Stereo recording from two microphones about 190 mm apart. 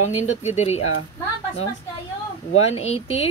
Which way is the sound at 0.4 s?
35° left (ahead or behind).